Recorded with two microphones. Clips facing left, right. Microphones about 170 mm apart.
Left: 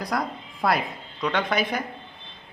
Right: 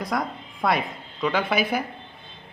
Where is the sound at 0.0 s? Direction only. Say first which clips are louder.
Right 1 dB; centre (ahead or behind).